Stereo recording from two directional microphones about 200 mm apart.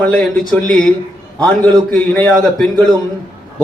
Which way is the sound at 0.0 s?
5° left (ahead or behind).